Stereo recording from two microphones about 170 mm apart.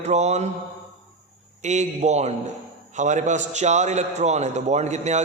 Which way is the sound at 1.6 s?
40° right (ahead or behind).